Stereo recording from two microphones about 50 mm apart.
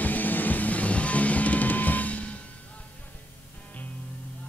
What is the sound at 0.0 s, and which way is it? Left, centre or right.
Music, left.